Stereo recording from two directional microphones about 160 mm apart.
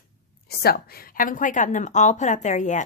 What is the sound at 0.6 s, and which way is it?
Speech, 75° left (ahead or behind).